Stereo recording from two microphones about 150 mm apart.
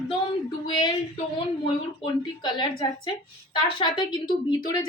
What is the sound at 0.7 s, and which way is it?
Speech, 30° left (ahead or behind).